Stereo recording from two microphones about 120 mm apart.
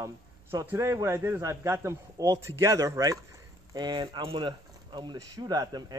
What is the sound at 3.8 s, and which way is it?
Speech, 40° right (ahead or behind).